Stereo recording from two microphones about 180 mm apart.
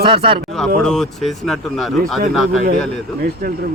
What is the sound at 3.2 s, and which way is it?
Speech, 55° right (ahead or behind).